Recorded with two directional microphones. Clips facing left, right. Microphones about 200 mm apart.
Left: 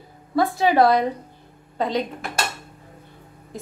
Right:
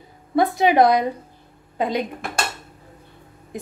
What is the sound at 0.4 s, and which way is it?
A woman's voice, 20° right (ahead or behind).